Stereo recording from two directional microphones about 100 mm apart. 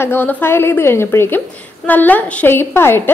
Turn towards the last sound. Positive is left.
turn(degrees=25)  # may be behind; listen again after turning